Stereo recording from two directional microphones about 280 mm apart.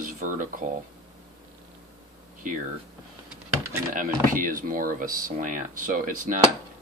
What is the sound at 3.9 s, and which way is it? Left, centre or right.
Speech, right.